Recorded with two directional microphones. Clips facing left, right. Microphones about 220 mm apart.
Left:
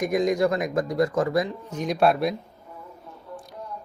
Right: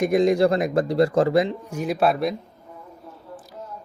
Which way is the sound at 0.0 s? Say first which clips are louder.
Right 4 dB; 30° right (ahead or behind).